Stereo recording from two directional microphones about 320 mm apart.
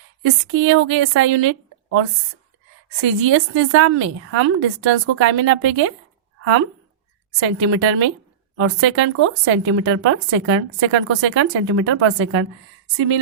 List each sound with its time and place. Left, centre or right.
0.3 s a woman's voice: right